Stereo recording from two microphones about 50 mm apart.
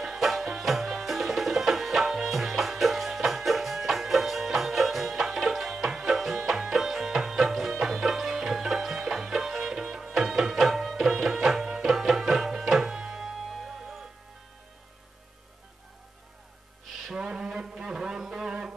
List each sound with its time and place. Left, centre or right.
0.0 s music: centre
17.0 s music: centre